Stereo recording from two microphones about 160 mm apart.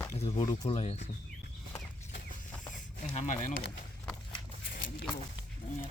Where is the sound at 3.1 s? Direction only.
50° left (ahead or behind).